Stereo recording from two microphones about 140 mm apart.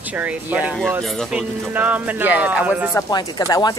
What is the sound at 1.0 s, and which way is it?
Speech, centre (ahead or behind).